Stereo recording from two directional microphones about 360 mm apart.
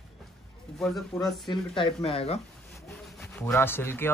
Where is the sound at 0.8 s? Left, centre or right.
Centre.